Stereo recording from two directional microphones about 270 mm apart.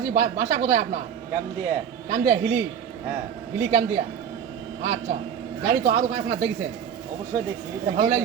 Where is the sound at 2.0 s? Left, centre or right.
Right.